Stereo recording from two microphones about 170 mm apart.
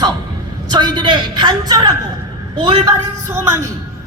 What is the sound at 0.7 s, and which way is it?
A woman's voice, 25° right (ahead or behind).